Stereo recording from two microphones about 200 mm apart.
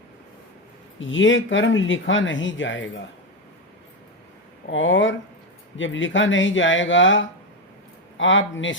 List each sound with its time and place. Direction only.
0.9 s speech: 70° left (ahead or behind)
4.7 s speech: 70° left (ahead or behind)